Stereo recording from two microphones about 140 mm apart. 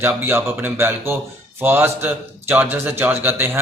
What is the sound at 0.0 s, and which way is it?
A man's voice, 15° right (ahead or behind).